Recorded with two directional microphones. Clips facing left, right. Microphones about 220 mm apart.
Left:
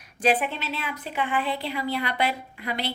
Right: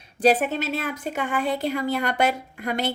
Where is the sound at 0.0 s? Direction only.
40° right (ahead or behind).